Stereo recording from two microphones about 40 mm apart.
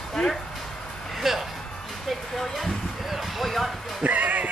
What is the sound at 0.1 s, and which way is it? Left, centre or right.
Speech, centre.